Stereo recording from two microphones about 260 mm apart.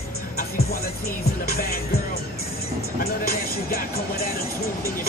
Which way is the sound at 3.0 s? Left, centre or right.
Left.